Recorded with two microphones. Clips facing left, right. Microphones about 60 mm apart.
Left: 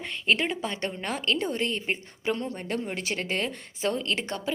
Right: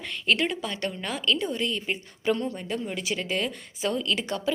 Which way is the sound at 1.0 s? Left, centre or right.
Left.